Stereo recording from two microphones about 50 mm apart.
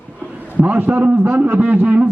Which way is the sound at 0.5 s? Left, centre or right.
Right.